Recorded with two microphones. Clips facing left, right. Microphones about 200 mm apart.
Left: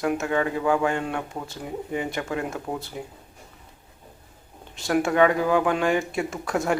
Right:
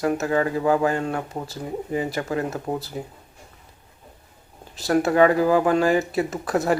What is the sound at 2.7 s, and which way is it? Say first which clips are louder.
Speech: right 4 dB; 15° right (ahead or behind).